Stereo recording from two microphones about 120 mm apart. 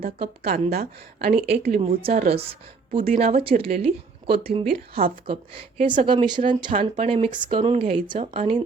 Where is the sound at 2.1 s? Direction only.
60° right (ahead or behind); by 6.7 s 45° right (ahead or behind).